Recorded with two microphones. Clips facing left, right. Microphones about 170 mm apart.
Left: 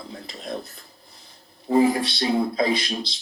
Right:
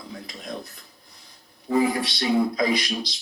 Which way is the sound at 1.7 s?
40° left (ahead or behind).